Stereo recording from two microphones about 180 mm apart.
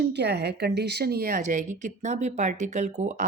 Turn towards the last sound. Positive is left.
turn(degrees=-40)  # may be behind; listen again after turning